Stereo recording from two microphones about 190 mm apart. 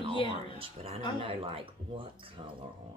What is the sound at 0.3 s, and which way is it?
Speech, 30° right (ahead or behind).